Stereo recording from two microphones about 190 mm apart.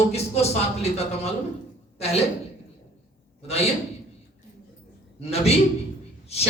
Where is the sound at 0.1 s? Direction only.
35° left (ahead or behind).